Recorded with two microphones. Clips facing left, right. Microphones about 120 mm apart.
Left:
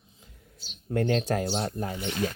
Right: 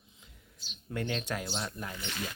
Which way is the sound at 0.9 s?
45° left (ahead or behind).